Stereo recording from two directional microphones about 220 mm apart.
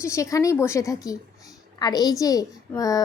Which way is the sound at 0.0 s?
15° left (ahead or behind).